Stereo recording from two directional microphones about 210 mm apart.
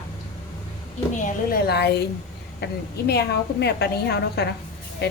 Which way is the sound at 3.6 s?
50° left (ahead or behind).